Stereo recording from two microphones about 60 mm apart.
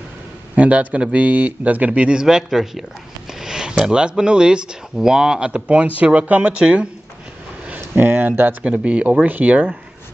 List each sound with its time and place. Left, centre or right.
0.6 s speech: right
2.2 s speech: centre
7.9 s speech: right
8.6 s speech: right